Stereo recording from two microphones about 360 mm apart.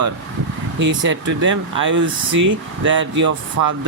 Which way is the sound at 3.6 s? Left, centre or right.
Right.